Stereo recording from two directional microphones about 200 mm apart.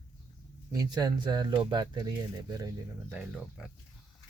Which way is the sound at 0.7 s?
20° right (ahead or behind).